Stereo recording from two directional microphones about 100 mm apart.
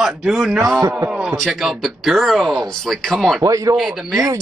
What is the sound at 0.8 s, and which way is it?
Speech, 30° right (ahead or behind).